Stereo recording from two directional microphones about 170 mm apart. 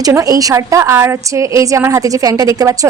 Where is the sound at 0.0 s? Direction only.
20° right (ahead or behind).